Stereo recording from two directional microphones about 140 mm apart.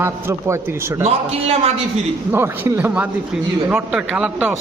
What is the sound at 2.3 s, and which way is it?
A man's voice, 15° right (ahead or behind).